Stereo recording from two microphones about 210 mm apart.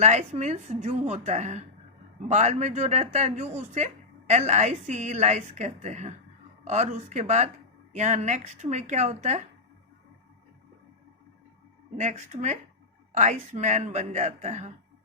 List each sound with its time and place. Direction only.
0.0 s a woman's voice: 30° right (ahead or behind)
11.9 s a woman's voice: 35° right (ahead or behind)